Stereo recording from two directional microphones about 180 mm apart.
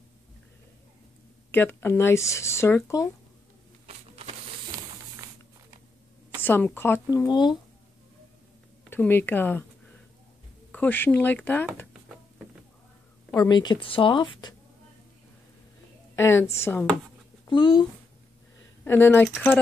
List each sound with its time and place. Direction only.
1.5 s speech: 10° left (ahead or behind)
3.8 s a sound: 35° right (ahead or behind)
6.4 s speech: 10° left (ahead or behind)
8.9 s speech: 10° left (ahead or behind)
10.7 s speech: 10° left (ahead or behind)
13.3 s a woman's voice: 20° left (ahead or behind)
16.2 s speech: 15° left (ahead or behind)
17.5 s a woman's voice: 25° left (ahead or behind)
18.9 s speech: 15° left (ahead or behind)